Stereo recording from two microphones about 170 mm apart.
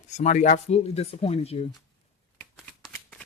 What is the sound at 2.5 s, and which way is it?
Shuffling cards, centre (ahead or behind).